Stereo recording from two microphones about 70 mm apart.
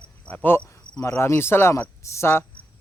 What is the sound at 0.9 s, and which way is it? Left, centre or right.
Cricket, left.